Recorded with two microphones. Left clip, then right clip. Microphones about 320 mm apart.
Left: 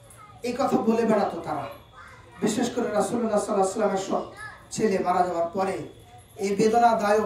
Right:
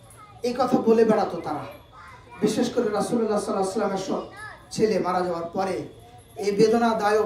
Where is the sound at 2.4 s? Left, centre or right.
Centre.